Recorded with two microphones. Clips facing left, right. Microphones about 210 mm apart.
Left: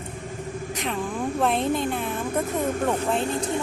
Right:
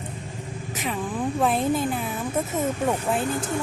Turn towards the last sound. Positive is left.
turn(degrees=25)  # may be behind; listen again after turning